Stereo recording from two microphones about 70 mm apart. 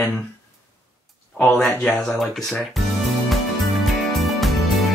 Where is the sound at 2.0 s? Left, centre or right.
Centre.